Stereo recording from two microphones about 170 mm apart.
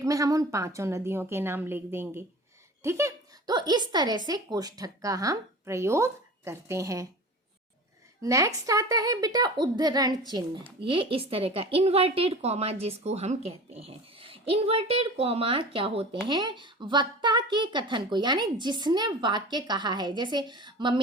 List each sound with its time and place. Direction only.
0.0 s a woman's voice: 20° right (ahead or behind)
8.2 s a woman's voice: 20° right (ahead or behind)